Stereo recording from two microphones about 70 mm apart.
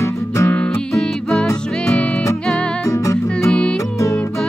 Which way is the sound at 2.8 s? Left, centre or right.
Left.